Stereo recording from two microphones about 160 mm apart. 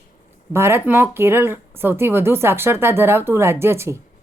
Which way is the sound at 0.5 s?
15° right (ahead or behind).